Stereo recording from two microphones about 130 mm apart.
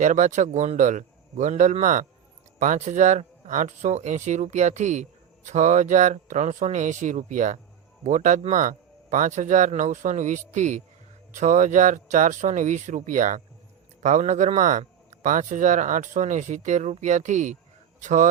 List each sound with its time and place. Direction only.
0.0 s speech: 70° right (ahead or behind)
14.0 s speech: 65° right (ahead or behind)